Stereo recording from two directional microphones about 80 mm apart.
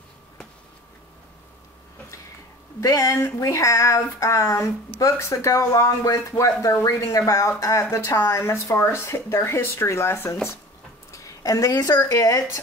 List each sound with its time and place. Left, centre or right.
2.8 s speech: left
11.1 s a sound: left
12.1 s speech: left